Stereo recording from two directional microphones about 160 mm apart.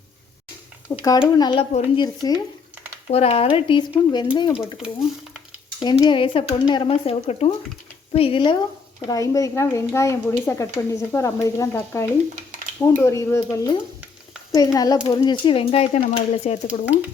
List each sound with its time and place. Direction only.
0.9 s speech: 25° left (ahead or behind)
3.1 s speech: 40° left (ahead or behind)
4.6 s speech: 5° right (ahead or behind)
5.8 s speech: 25° left (ahead or behind)
9.0 s speech: 20° left (ahead or behind); by 16.6 s 40° left (ahead or behind)
16.6 s speech: 10° right (ahead or behind)